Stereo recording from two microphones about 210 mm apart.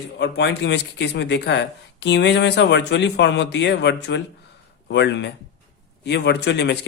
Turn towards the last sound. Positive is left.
turn(degrees=55)  # may be behind; listen again after turning